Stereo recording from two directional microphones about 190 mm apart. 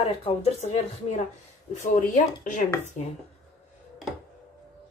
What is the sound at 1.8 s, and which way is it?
Speech, 40° left (ahead or behind).